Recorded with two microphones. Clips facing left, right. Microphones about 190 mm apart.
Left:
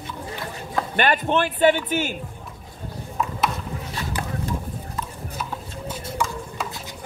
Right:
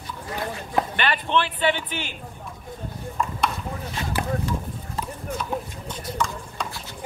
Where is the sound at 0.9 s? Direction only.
45° left (ahead or behind).